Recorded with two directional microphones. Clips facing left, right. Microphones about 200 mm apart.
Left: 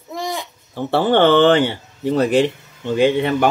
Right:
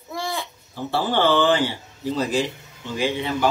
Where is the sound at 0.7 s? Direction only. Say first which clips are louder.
Left 7 dB; 60° left (ahead or behind).